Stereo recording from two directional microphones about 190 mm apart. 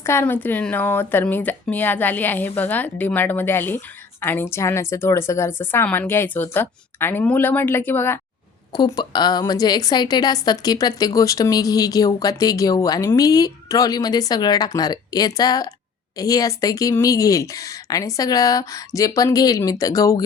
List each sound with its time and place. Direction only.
0.0 s a woman's voice: 15° left (ahead or behind)